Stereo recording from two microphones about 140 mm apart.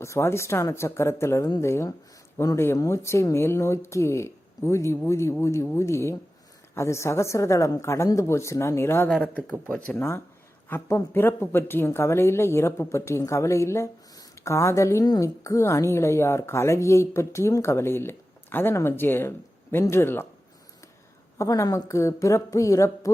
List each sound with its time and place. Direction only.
0.0 s a woman's voice: 20° left (ahead or behind)
21.3 s a woman's voice: 20° left (ahead or behind)